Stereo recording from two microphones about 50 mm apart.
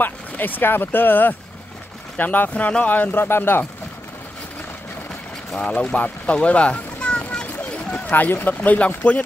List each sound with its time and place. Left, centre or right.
0.0 s speech: left
3.3 s speech: left
5.6 s speech: left
7.3 s a sound: centre
8.1 s speech: left
8.5 s speech: left